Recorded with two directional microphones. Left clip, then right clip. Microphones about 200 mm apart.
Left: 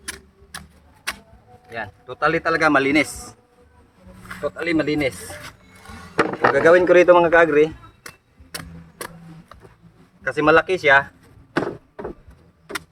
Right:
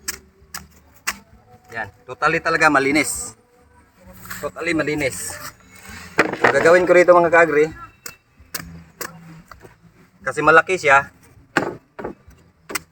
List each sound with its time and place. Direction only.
0.0 s typewriter: 5° left (ahead or behind)
1.7 s a man's voice: 5° left (ahead or behind)
4.4 s speech: 5° left (ahead or behind)
6.1 s a sound: 25° right (ahead or behind)
6.7 s a man's voice: 15° left (ahead or behind)
8.5 s a sound: 5° left (ahead or behind)
10.2 s speech: 10° left (ahead or behind)